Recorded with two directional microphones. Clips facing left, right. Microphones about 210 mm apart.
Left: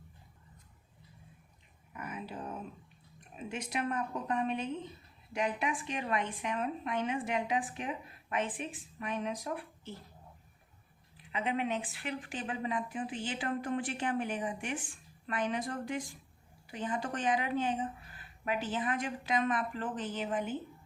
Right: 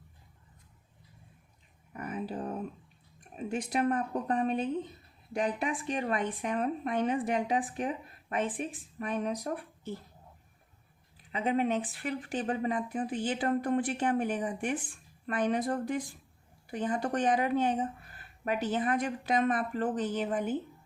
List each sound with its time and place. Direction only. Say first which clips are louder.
1.9 s a sound: right 6 dB; 35° right (ahead or behind)
3.3 s speech: right 6 dB; 35° right (ahead or behind)
11.3 s speech: right 5 dB; 40° right (ahead or behind)